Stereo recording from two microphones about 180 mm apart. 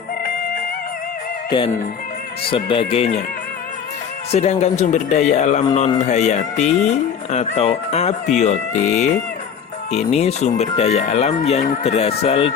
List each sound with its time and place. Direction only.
1.5 s music: 30° left (ahead or behind)
2.5 s speech: 30° left (ahead or behind)
4.3 s speech: 35° left (ahead or behind)